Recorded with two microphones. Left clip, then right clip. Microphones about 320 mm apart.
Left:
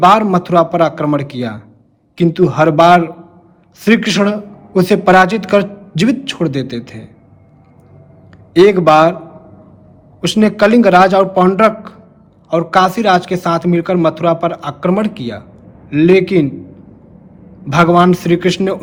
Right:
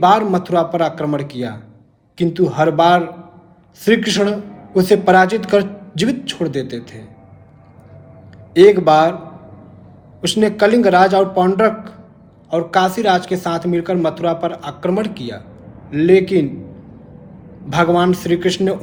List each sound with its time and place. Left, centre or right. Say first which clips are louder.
0.0 s a man's voice: left 3 dB; left
8.5 s a man's voice: left 2 dB; left
10.2 s a man's voice: left 2 dB; left
17.7 s a man's voice: left 4 dB; left